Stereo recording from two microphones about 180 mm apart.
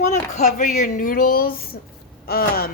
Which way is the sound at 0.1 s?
40° left (ahead or behind).